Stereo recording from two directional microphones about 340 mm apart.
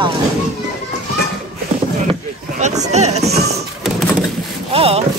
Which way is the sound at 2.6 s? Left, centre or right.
Centre.